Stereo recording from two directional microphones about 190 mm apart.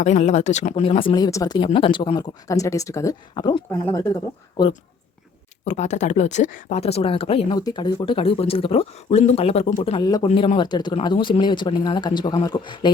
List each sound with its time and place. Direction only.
0.0 s speech: 40° left (ahead or behind); by 4.7 s 20° left (ahead or behind)
5.6 s speech: 35° left (ahead or behind)